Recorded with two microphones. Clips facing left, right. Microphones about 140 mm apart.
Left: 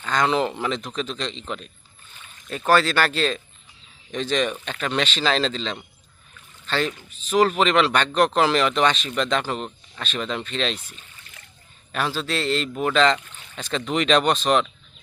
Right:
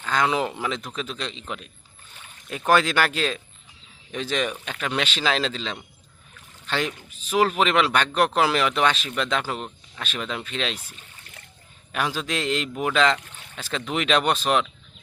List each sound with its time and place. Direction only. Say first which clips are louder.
0.0 s speech: left 2 dB; 5° right (ahead or behind)